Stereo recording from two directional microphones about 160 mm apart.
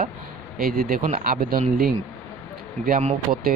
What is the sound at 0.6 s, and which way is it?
Speech, 65° right (ahead or behind).